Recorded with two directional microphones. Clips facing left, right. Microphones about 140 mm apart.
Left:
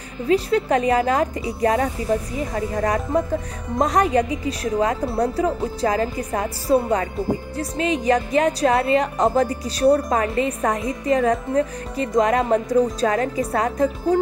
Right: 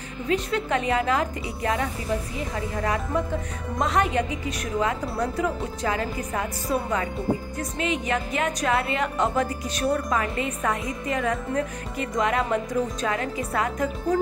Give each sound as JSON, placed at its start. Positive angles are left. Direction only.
{"t": 0.3, "sound": "a woman's voice", "side_deg": 35}